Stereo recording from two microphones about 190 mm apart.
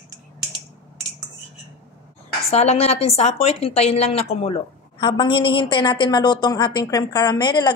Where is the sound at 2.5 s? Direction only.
35° left (ahead or behind).